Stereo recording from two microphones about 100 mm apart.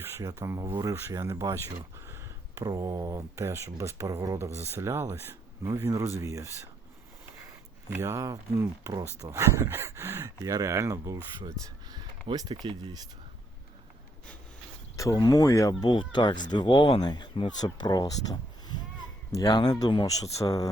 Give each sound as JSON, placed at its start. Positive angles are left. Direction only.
{"t": 0.0, "sound": "speech", "side_deg": -30}
{"t": 7.9, "sound": "speech", "side_deg": -25}
{"t": 9.2, "sound": "speech", "side_deg": -30}
{"t": 11.6, "sound": "a sound", "side_deg": -45}
{"t": 12.6, "sound": "speech", "side_deg": -40}
{"t": 14.9, "sound": "speech", "side_deg": 35}
{"t": 16.0, "sound": "speech", "side_deg": 50}
{"t": 19.5, "sound": "speech", "side_deg": 45}